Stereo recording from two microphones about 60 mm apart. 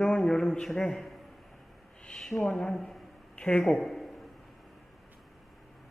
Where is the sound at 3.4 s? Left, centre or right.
Centre.